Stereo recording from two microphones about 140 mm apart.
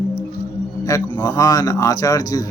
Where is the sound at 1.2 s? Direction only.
25° left (ahead or behind).